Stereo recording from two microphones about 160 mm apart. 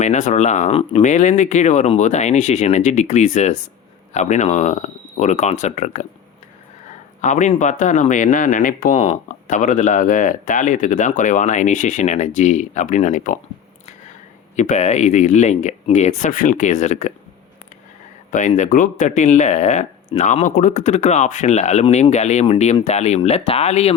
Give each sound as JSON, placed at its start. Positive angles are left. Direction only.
{"t": 0.0, "sound": "speech", "side_deg": 50}
{"t": 7.2, "sound": "speech", "side_deg": 50}
{"t": 14.5, "sound": "speech", "side_deg": 50}
{"t": 18.3, "sound": "speech", "side_deg": 50}